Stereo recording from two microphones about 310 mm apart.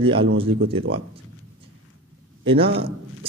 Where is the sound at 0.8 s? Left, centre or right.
Right.